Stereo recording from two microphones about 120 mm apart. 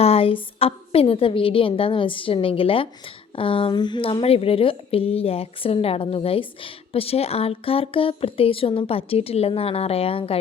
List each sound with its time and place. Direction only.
0.0 s speech: 55° left (ahead or behind)